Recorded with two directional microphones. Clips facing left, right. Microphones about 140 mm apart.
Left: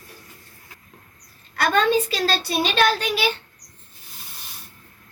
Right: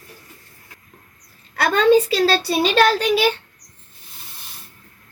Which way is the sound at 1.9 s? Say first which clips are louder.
Right 7 dB; 65° right (ahead or behind).